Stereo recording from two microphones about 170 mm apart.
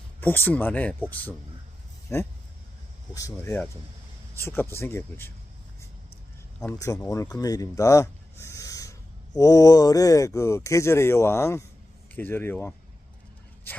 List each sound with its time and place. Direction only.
0.2 s speech: 10° left (ahead or behind)
2.1 s speech: 15° left (ahead or behind)
6.6 s speech: 20° left (ahead or behind)